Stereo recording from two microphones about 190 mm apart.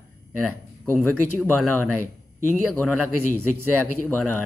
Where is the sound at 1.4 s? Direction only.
5° left (ahead or behind).